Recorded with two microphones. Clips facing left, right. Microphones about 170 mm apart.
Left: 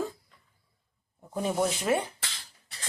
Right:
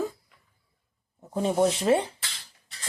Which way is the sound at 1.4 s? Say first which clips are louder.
Right 5 dB; 25° right (ahead or behind).